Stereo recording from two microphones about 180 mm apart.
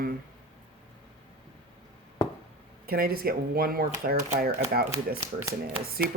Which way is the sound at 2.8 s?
55° right (ahead or behind).